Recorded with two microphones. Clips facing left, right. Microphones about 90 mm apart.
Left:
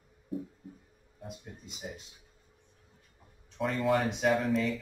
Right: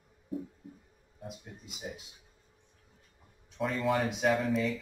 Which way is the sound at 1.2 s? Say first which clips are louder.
Even; 5° right (ahead or behind).